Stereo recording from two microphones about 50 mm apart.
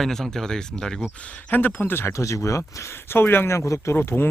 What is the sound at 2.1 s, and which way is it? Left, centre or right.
Speech, left.